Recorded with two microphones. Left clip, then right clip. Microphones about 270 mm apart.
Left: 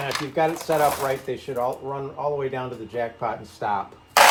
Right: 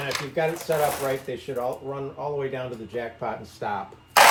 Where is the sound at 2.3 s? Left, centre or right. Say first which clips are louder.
Left 2 dB; centre.